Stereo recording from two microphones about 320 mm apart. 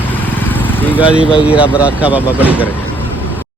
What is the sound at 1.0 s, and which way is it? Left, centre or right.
Speech, centre.